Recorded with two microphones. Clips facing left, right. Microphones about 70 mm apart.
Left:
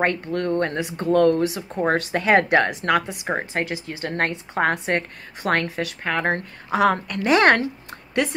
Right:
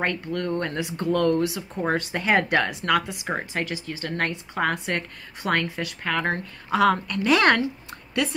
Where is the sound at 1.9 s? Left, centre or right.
Left.